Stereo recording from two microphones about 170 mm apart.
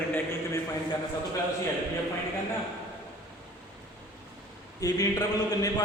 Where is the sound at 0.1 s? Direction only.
15° left (ahead or behind).